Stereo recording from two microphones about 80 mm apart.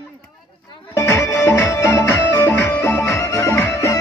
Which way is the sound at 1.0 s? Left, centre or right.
Left.